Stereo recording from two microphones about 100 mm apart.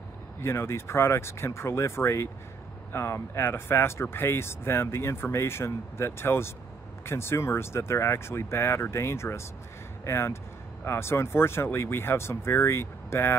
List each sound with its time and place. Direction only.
0.4 s speech: 25° left (ahead or behind)